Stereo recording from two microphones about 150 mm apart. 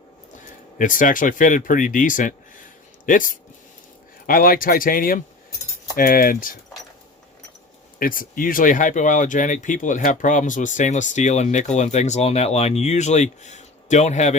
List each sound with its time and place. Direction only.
0.8 s speech: 60° left (ahead or behind)
7.9 s speech: 70° left (ahead or behind); by 14.3 s 50° left (ahead or behind)